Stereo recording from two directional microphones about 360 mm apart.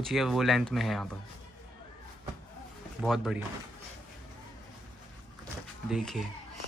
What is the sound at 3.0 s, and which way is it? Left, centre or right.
Speech, centre.